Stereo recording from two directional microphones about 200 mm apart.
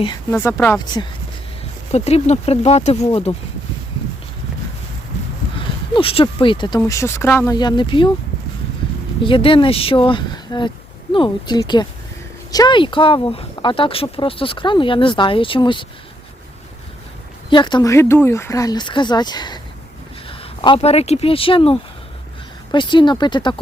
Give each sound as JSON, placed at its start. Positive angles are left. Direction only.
{"t": 0.3, "sound": "speech", "side_deg": 10}
{"t": 1.9, "sound": "speech", "side_deg": 30}
{"t": 5.5, "sound": "speech", "side_deg": 25}
{"t": 9.2, "sound": "speech", "side_deg": 25}
{"t": 17.5, "sound": "speech", "side_deg": 20}